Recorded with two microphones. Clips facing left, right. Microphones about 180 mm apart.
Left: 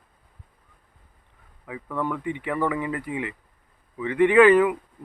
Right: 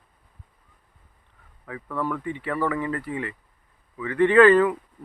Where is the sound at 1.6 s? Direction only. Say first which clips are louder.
Even; 15° left (ahead or behind).